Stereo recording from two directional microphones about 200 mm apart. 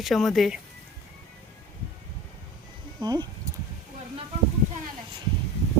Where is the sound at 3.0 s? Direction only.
20° right (ahead or behind).